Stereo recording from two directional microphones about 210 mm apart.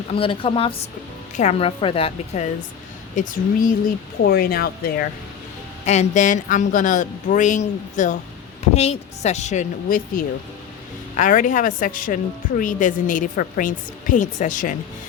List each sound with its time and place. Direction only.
0.1 s a woman's voice: 25° left (ahead or behind)
4.2 s speech: 45° left (ahead or behind)
5.8 s a woman's voice: 35° left (ahead or behind)